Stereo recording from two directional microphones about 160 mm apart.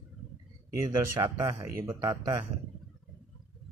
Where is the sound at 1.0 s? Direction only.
15° right (ahead or behind).